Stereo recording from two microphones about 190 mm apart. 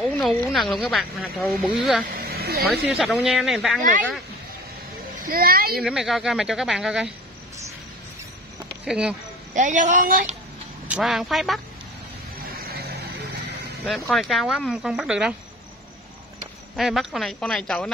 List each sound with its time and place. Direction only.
0.2 s speech: centre (ahead or behind)
2.1 s speech: 55° right (ahead or behind)
2.9 s speech: 5° right (ahead or behind)
5.1 s a child's voice: 45° right (ahead or behind)
5.8 s speech: centre (ahead or behind)
8.8 s speech: 5° right (ahead or behind)
9.5 s a woman's voice: 40° right (ahead or behind)
10.9 s speech: centre (ahead or behind)
12.5 s vehicle: 55° right (ahead or behind)
13.8 s speech: centre (ahead or behind)
16.7 s speech: centre (ahead or behind)